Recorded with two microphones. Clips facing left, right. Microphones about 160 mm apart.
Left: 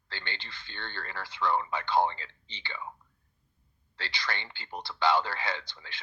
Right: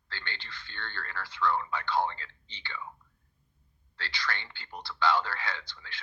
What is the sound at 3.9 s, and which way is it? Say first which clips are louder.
Speech: even; 20° left (ahead or behind).